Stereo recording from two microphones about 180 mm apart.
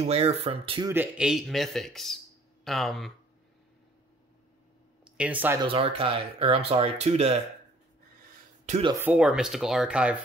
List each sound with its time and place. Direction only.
0.0 s speech: 35° right (ahead or behind)
0.8 s speech: 10° right (ahead or behind)
5.0 s speech: 5° right (ahead or behind)
5.6 s speech: 30° right (ahead or behind)
9.0 s speech: 5° right (ahead or behind)